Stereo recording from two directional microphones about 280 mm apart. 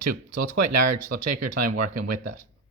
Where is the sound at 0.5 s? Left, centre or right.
Right.